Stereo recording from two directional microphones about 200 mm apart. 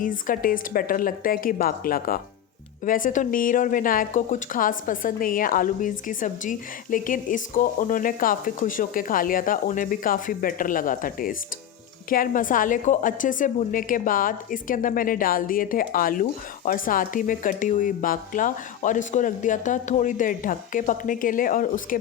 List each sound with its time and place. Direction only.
0.0 s a woman's voice: 45° left (ahead or behind)